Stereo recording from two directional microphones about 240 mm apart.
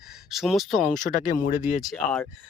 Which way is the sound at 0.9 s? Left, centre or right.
Left.